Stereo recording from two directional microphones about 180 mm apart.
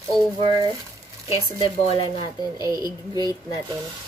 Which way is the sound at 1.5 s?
30° left (ahead or behind).